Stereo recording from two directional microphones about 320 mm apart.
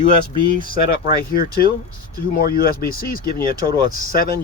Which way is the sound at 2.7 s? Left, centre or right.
Left.